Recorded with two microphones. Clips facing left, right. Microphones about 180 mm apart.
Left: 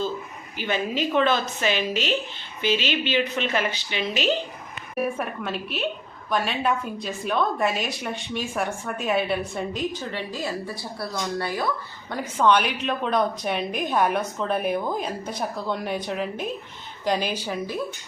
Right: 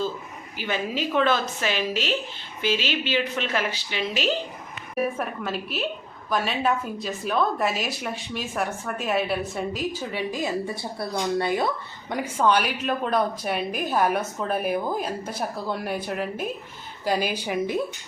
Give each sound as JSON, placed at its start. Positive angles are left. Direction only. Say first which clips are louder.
{"t": 0.6, "sound": "a woman's voice", "louder": "left 2 dB", "side_deg": -5}
{"t": 12.1, "sound": "a woman's voice", "louder": "left 1 dB", "side_deg": -10}